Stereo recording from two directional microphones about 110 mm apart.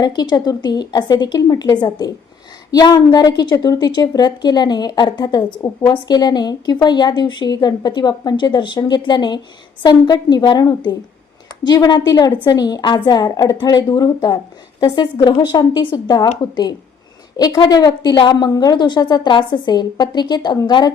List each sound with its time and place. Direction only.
0.0 s a woman's voice: 40° left (ahead or behind)
17.3 s a woman's voice: 35° left (ahead or behind)